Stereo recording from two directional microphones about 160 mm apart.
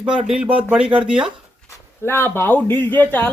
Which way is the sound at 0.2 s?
5° right (ahead or behind).